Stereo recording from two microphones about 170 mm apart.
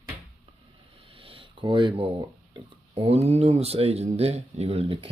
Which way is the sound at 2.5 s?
35° right (ahead or behind).